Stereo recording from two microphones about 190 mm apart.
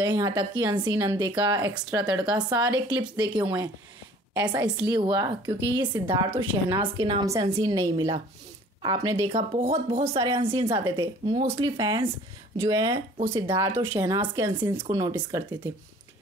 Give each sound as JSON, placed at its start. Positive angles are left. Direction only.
{"t": 0.0, "sound": "speech", "side_deg": -20}
{"t": 9.7, "sound": "speech", "side_deg": -30}